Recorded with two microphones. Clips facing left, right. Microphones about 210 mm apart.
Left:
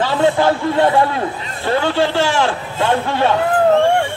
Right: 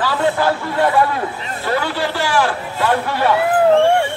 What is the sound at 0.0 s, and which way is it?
A man's voice, 25° left (ahead or behind).